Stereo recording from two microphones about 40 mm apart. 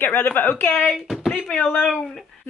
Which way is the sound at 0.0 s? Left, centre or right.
Left.